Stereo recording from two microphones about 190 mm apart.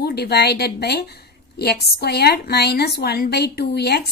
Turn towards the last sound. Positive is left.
turn(degrees=60)  # may be behind; listen again after turning